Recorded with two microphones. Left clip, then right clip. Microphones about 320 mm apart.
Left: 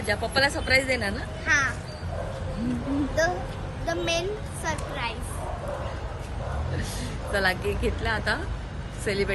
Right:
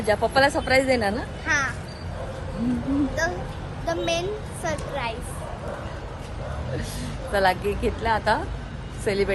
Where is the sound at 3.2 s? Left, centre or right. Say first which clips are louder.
Left 4 dB; centre.